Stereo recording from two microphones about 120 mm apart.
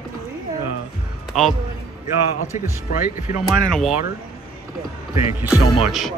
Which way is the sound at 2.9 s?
90° left.